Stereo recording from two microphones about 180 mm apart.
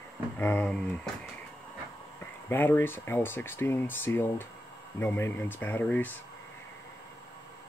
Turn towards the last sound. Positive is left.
turn(degrees=10)  # may be behind; listen again after turning